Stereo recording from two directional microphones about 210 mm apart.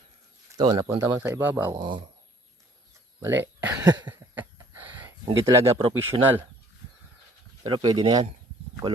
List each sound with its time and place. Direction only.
0.5 s speech: 20° right (ahead or behind)
1.7 s speech: 20° right (ahead or behind)
3.2 s speech: 10° right (ahead or behind)
4.1 s a sound: 10° right (ahead or behind)
5.5 s speech: 15° right (ahead or behind)
7.6 s speech: 20° right (ahead or behind)